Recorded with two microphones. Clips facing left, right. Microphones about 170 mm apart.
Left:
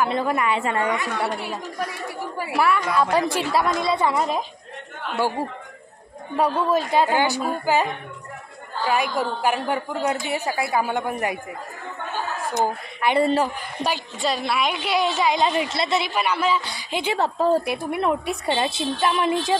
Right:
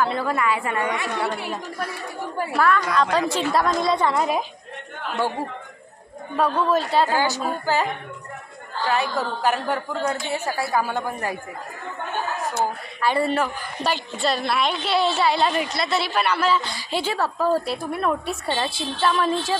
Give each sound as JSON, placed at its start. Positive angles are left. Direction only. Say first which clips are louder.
{"t": 0.0, "sound": "a woman's voice", "louder": "left 1 dB", "side_deg": 20}
{"t": 0.8, "sound": "speech", "louder": "left 1 dB", "side_deg": -20}
{"t": 2.3, "sound": "a woman's voice", "louder": "right 1 dB", "side_deg": 10}
{"t": 6.3, "sound": "a woman's voice", "louder": "even", "side_deg": 10}
{"t": 8.8, "sound": "a woman's voice", "louder": "left 1 dB", "side_deg": 10}
{"t": 12.5, "sound": "a woman's voice", "louder": "left 2 dB", "side_deg": 20}